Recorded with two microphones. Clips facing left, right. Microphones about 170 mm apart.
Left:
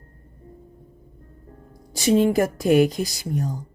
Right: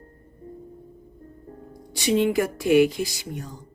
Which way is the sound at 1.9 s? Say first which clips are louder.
Left 3 dB; 40° left (ahead or behind).